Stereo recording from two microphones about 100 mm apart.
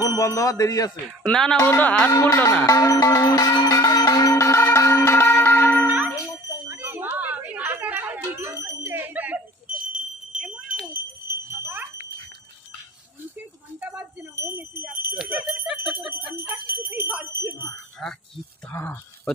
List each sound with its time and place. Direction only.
0.0 s speech: 35° left (ahead or behind)
1.3 s speech: 5° left (ahead or behind)
1.6 s speech: 25° left (ahead or behind)
1.9 s speech: 15° left (ahead or behind)
2.6 s music: 30° left (ahead or behind)
5.9 s a sound: 15° right (ahead or behind)
8.5 s bicycle bell: 30° right (ahead or behind)
9.9 s wind chime: 10° right (ahead or behind)
10.9 s wind chime: 20° right (ahead or behind)
14.5 s wind chime: 15° right (ahead or behind)
15.2 s bell: 10° right (ahead or behind)
17.3 s wind chime: 25° right (ahead or behind)
18.0 s wind chime: centre (ahead or behind)
18.7 s a sound: 25° left (ahead or behind)